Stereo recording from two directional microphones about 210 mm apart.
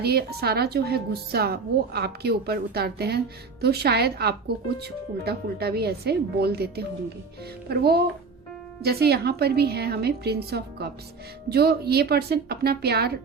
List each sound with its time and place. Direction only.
0.0 s speech: 50° right (ahead or behind)